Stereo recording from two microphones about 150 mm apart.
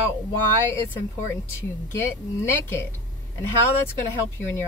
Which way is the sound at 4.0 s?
15° left (ahead or behind).